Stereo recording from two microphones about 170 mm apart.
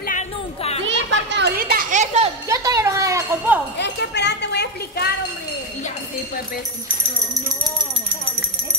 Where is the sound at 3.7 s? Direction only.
90° left.